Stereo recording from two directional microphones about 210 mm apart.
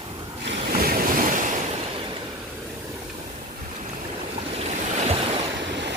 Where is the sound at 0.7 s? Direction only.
45° right (ahead or behind).